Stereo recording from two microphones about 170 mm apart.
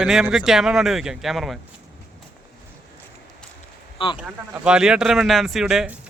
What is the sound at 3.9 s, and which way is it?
Speech, 30° left (ahead or behind).